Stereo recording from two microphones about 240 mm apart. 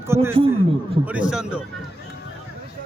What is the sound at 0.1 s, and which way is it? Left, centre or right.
A man's voice, centre.